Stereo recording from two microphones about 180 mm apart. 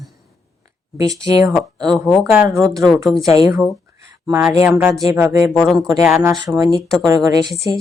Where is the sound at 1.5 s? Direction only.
Centre (ahead or behind).